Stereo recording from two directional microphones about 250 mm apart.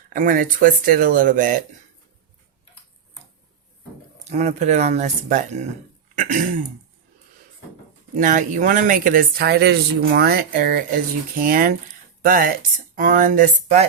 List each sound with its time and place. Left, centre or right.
0.1 s speech: right
4.2 s speech: right
8.1 s speech: right